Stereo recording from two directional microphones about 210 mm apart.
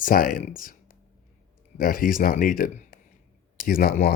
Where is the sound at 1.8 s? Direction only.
40° left (ahead or behind).